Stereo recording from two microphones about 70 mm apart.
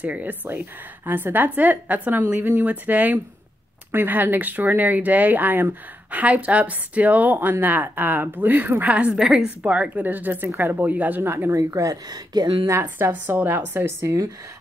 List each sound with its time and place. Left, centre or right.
0.0 s a woman's voice: right
11.2 s speech: right
11.5 s a woman's voice: right
12.3 s speech: right
13.1 s a woman's voice: right
13.8 s speech: right